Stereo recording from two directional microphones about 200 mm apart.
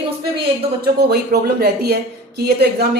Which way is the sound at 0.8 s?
50° right (ahead or behind).